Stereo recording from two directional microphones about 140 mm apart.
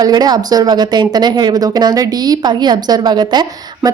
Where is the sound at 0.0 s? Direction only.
30° right (ahead or behind).